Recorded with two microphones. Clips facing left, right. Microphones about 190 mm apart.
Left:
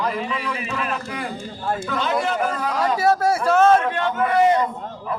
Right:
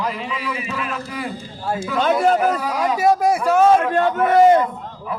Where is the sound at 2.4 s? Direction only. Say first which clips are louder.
Right 3 dB; 5° right (ahead or behind).